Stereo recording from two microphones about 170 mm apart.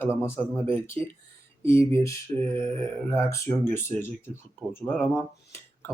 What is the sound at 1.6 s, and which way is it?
Speech, 15° left (ahead or behind).